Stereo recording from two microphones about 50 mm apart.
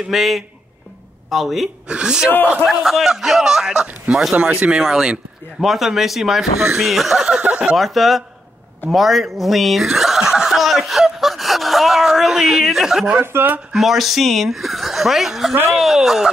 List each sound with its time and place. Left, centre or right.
0.1 s a woman's voice: centre
1.9 s speech: centre
2.6 s a woman's voice: centre
4.4 s speech: right
4.7 s a woman's voice: centre
7.2 s speech: centre
7.7 s a woman's voice: centre
8.9 s chuckle: centre
13.1 s speech: right
13.7 s a woman's voice: centre